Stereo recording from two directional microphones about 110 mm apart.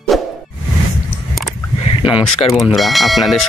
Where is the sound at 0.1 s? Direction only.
Centre (ahead or behind).